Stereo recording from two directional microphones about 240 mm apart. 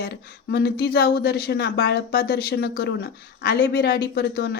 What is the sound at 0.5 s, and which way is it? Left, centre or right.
Speech, left.